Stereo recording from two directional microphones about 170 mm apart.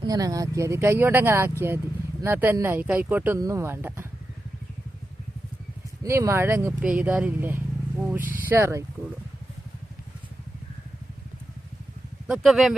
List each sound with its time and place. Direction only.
0.0 s speech: 20° right (ahead or behind)
6.0 s speech: 15° right (ahead or behind)
8.2 s speech: 55° right (ahead or behind)
8.4 s speech: 15° right (ahead or behind)
12.3 s speech: centre (ahead or behind)